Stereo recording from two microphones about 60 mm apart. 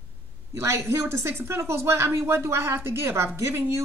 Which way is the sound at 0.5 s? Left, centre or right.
Right.